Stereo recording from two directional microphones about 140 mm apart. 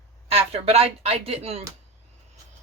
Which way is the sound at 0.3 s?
45° right (ahead or behind).